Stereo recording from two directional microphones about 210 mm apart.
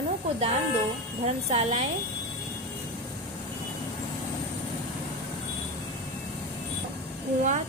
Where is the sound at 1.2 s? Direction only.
30° right (ahead or behind).